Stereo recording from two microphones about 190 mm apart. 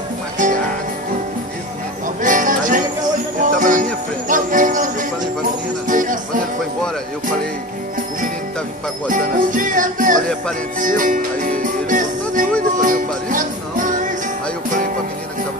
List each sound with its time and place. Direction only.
0.4 s music: 40° right (ahead or behind)
2.2 s music: 45° right (ahead or behind)
9.1 s music: 45° right (ahead or behind)